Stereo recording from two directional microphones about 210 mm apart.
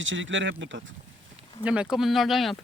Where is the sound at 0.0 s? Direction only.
65° right (ahead or behind).